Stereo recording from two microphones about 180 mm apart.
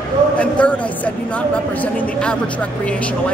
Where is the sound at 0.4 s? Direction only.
5° left (ahead or behind).